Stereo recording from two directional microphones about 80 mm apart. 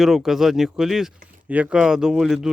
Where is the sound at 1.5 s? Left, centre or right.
Centre.